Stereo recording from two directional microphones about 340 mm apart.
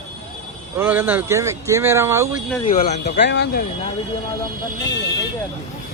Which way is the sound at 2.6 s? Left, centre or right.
Centre.